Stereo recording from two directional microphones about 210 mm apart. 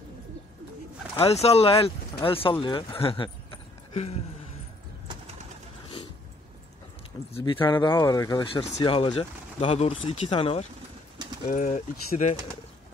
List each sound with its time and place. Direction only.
1.1 s speech: 30° left (ahead or behind)
7.3 s speech: 25° left (ahead or behind)
11.4 s speech: 40° left (ahead or behind)